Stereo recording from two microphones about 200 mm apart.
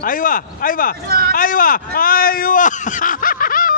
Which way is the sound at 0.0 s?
40° left (ahead or behind).